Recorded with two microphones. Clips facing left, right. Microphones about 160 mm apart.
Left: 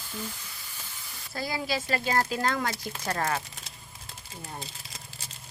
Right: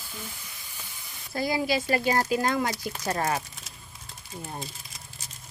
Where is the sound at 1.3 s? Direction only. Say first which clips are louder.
Right 5 dB; 15° right (ahead or behind).